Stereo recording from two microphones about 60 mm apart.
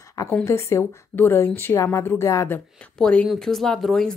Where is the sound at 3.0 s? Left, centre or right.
Centre.